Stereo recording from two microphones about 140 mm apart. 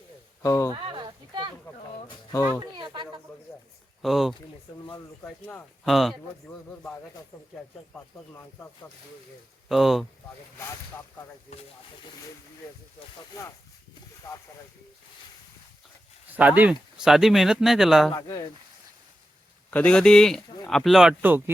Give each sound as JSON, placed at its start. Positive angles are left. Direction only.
{"t": 0.4, "sound": "speech", "side_deg": 20}
{"t": 0.7, "sound": "a sound", "side_deg": -35}
{"t": 2.7, "sound": "a sound", "side_deg": -35}
{"t": 4.0, "sound": "speech", "side_deg": 0}
{"t": 5.2, "sound": "speech", "side_deg": 15}
{"t": 5.8, "sound": "speech", "side_deg": 0}
{"t": 6.7, "sound": "speech", "side_deg": 10}
{"t": 9.6, "sound": "speech", "side_deg": 0}
{"t": 16.3, "sound": "speech", "side_deg": -10}
{"t": 18.1, "sound": "speech", "side_deg": 25}
{"t": 19.7, "sound": "speech", "side_deg": 10}